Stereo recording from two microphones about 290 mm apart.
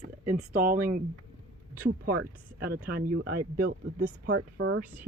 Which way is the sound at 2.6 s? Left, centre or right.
Right.